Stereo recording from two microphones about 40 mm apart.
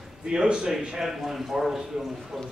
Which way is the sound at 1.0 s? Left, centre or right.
Centre.